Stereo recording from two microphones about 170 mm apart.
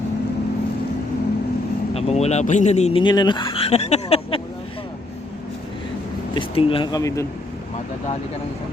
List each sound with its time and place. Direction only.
1.9 s speech: 35° left (ahead or behind)
3.0 s speech: 25° left (ahead or behind)
6.3 s speech: 30° left (ahead or behind)